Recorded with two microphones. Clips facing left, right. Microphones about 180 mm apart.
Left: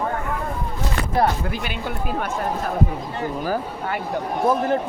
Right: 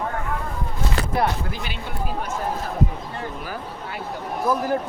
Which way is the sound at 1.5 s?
55° left (ahead or behind).